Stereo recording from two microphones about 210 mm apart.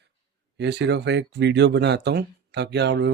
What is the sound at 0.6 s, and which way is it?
Speech, 55° right (ahead or behind).